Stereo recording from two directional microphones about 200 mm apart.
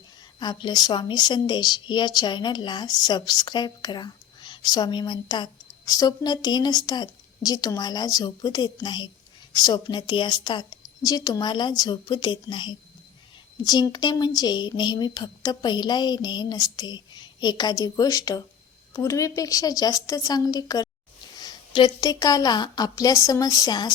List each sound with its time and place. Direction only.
0.3 s a woman's voice: 20° left (ahead or behind)